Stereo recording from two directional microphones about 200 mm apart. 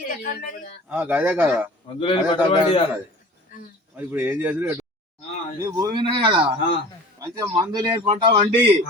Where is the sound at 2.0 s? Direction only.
25° left (ahead or behind).